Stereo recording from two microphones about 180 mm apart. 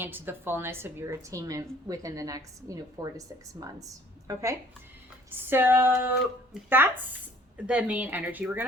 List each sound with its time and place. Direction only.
0.0 s a woman's voice: 10° right (ahead or behind)